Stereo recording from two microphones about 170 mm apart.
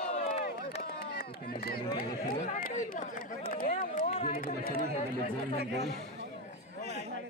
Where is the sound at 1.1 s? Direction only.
60° left (ahead or behind).